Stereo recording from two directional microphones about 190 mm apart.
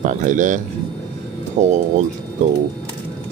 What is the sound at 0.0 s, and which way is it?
Speech, 40° right (ahead or behind).